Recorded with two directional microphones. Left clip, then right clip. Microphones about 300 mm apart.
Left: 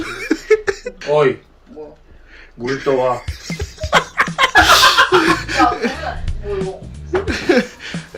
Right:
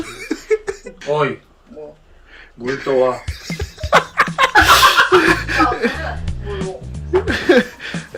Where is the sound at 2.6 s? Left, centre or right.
Centre.